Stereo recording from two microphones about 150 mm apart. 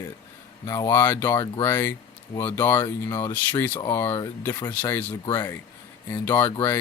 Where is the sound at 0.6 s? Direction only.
20° left (ahead or behind).